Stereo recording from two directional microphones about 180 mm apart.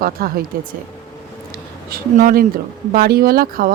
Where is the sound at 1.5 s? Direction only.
55° right (ahead or behind).